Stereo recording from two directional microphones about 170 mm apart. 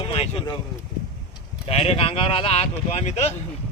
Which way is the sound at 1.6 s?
35° left (ahead or behind).